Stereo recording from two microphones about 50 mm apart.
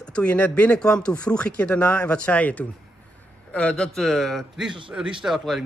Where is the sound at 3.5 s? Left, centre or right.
Centre.